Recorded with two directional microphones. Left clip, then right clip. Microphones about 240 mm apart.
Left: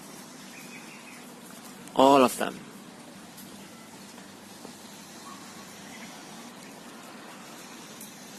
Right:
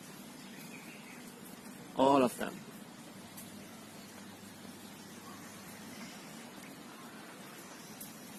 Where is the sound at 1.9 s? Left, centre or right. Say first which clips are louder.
Left 9 dB; left.